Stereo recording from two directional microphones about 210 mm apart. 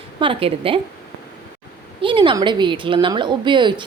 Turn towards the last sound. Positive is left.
turn(degrees=-20)  # may be behind; listen again after turning